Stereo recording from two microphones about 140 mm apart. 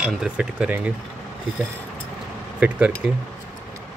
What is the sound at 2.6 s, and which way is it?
Speech, 10° right (ahead or behind).